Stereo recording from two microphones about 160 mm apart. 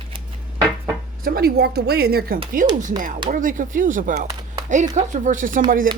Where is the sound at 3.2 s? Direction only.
55° right (ahead or behind).